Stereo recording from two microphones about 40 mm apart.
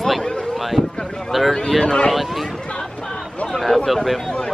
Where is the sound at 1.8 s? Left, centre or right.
Left.